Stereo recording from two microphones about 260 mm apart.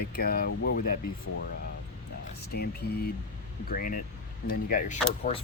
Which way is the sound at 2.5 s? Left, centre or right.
Left.